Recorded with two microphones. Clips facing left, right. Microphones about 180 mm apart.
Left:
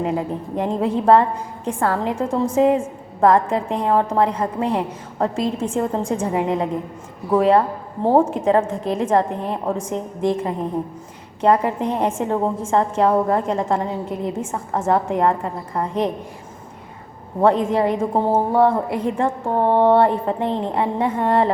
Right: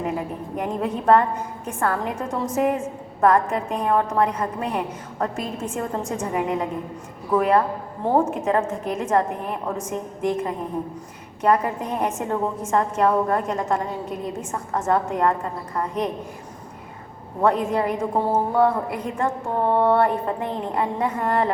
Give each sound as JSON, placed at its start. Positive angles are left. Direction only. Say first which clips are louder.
{"t": 0.5, "sound": "a woman's voice", "louder": "left 5 dB", "side_deg": 30}
{"t": 17.4, "sound": "a woman's voice", "louder": "left 4 dB", "side_deg": 30}